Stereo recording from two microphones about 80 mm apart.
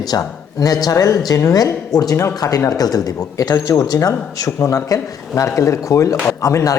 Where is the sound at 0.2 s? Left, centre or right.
Left.